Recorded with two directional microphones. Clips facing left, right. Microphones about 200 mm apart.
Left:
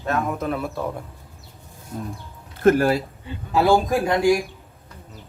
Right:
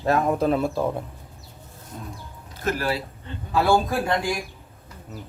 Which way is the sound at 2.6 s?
50° left (ahead or behind).